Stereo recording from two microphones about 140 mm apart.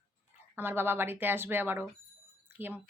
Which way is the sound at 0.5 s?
15° right (ahead or behind).